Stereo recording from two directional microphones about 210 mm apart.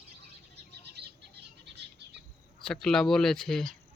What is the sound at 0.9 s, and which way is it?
Bird, 50° right (ahead or behind).